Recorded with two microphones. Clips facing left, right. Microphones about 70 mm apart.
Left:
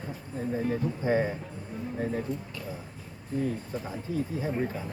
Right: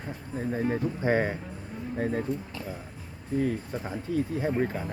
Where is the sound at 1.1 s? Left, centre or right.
Right.